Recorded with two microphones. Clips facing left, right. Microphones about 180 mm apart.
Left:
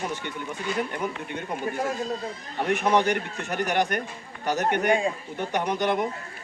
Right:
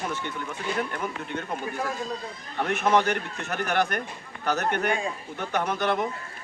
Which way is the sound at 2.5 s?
15° left (ahead or behind).